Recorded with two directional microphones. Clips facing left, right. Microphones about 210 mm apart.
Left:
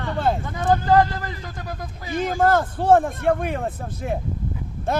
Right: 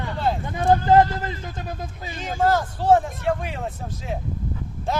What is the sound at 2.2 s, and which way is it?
Speech, 55° left (ahead or behind).